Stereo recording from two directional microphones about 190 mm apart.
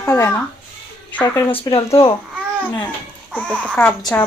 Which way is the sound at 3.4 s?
10° left (ahead or behind).